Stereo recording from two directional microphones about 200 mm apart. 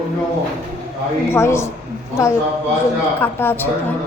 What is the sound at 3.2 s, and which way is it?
Speech, 10° left (ahead or behind).